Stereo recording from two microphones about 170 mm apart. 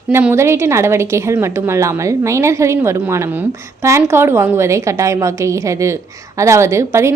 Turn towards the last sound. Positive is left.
turn(degrees=-15)  # may be behind; listen again after turning